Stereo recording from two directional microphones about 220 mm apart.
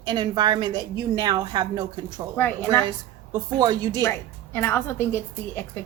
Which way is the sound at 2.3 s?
10° left (ahead or behind).